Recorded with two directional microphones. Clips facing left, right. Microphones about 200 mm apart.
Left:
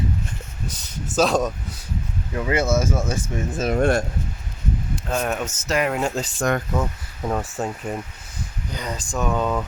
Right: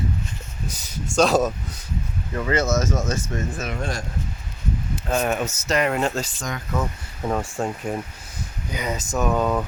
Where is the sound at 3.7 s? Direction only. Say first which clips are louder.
Left 10 dB; 55° left (ahead or behind).